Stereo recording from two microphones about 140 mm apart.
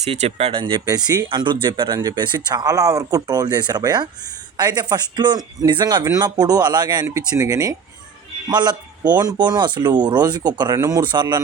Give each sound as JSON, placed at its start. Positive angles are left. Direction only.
{"t": 0.0, "sound": "speech", "side_deg": -50}
{"t": 0.6, "sound": "speech", "side_deg": -30}